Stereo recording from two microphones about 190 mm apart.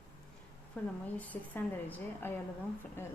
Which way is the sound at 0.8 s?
10° left (ahead or behind).